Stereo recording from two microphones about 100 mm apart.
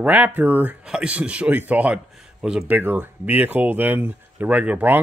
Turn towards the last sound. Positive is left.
turn(degrees=-15)  # may be behind; listen again after turning